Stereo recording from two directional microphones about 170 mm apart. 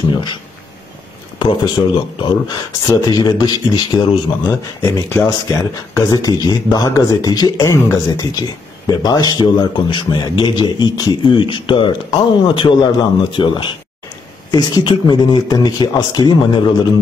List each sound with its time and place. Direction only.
0.1 s a man's voice: 25° left (ahead or behind)
1.4 s a man's voice: 30° left (ahead or behind)
4.5 s a man's voice: 15° left (ahead or behind)